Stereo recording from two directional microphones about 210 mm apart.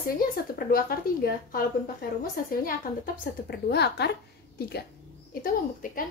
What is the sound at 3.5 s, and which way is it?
Speech, 50° left (ahead or behind).